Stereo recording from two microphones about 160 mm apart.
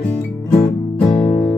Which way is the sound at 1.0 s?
30° left (ahead or behind).